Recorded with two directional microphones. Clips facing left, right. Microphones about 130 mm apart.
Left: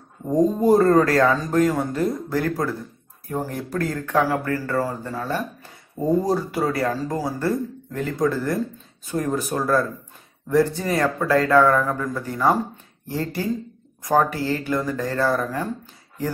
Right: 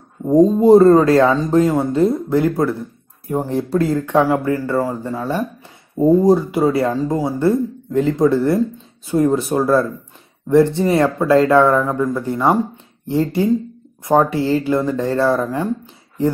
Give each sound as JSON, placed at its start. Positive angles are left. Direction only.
{"t": 0.2, "sound": "speech", "side_deg": -20}